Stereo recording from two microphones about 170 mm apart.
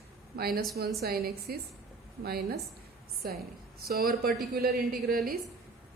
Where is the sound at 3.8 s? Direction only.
60° right (ahead or behind).